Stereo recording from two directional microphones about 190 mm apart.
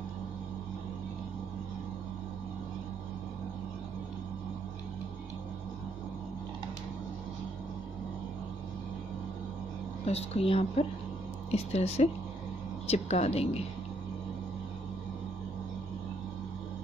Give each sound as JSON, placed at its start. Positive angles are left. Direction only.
{"t": 10.0, "sound": "speech", "side_deg": 35}